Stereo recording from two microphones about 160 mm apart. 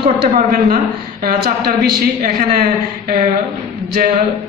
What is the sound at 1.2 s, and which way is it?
A man's voice, 65° right (ahead or behind).